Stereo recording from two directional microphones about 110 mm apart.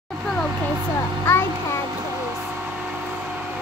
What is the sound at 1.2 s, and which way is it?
Music, 25° left (ahead or behind).